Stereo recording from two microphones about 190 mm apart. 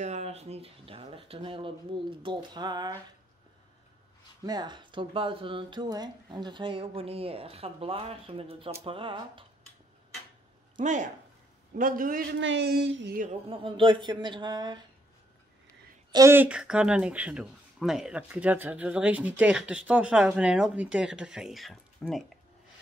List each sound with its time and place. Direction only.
0.0 s speech: 35° right (ahead or behind)
4.5 s speech: 20° right (ahead or behind)
10.8 s a man's voice: 40° right (ahead or behind)
12.4 s a sound: 70° right (ahead or behind)
13.2 s speech: 30° right (ahead or behind)
16.1 s speech: 15° right (ahead or behind); by 22.3 s centre (ahead or behind)